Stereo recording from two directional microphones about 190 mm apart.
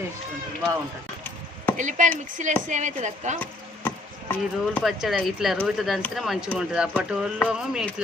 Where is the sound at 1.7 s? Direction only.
40° right (ahead or behind).